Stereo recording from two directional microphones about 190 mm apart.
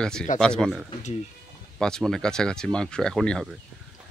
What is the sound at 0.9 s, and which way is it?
Speech, 35° left (ahead or behind).